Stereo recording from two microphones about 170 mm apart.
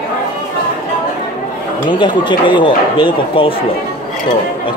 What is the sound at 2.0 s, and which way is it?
Speech, 25° left (ahead or behind).